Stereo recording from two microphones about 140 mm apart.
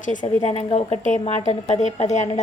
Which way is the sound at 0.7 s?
55° left (ahead or behind).